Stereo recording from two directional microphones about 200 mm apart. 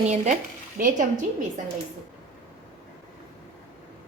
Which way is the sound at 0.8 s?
40° right (ahead or behind).